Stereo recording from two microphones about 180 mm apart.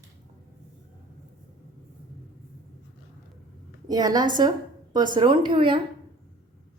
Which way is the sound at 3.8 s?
20° right (ahead or behind).